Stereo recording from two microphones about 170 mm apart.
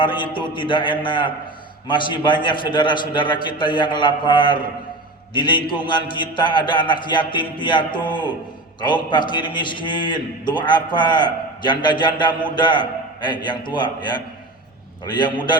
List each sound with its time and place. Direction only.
0.0 s a man's voice: 30° left (ahead or behind)